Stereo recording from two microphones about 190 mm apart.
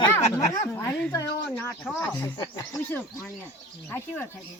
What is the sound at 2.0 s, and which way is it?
Speech, 15° left (ahead or behind).